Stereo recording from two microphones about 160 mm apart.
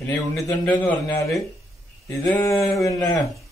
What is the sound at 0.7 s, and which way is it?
Speech, 10° left (ahead or behind).